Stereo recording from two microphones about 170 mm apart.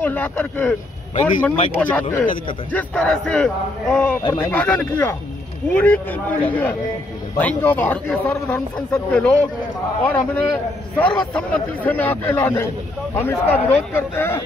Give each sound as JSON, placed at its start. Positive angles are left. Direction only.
{"t": 0.0, "sound": "a man's voice", "side_deg": 10}
{"t": 4.2, "sound": "a man's voice", "side_deg": 20}
{"t": 8.9, "sound": "a man's voice", "side_deg": 5}